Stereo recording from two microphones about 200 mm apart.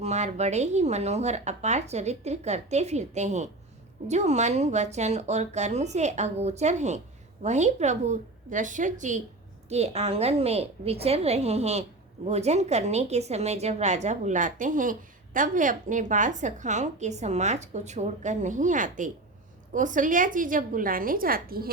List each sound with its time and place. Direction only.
0.0 s a woman's voice: 35° right (ahead or behind)